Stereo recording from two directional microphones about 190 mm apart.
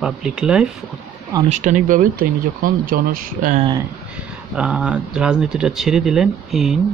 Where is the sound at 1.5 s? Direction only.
40° right (ahead or behind).